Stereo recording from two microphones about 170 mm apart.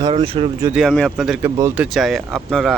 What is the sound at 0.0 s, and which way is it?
Speech, 30° right (ahead or behind).